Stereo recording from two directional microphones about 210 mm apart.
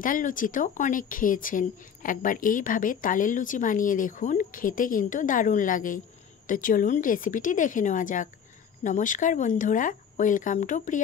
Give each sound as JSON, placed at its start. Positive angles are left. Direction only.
{"t": 0.0, "sound": "speech", "side_deg": 40}